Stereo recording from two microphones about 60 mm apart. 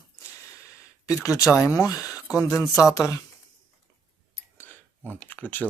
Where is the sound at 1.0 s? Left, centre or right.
Left.